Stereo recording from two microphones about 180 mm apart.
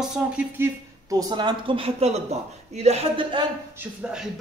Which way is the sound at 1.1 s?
20° right (ahead or behind).